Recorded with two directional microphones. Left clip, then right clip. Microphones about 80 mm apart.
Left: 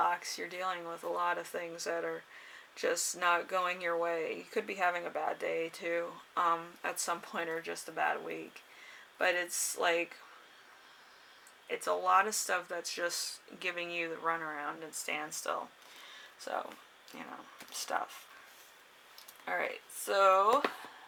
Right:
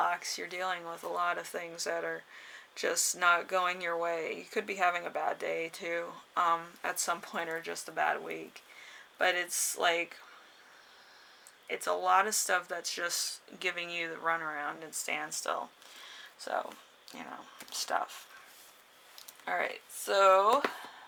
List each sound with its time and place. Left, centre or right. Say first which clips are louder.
0.0 s speech: even; right
11.7 s speech: right 1 dB; right
19.5 s speech: right 2 dB; right
20.5 s speech: right 1 dB; right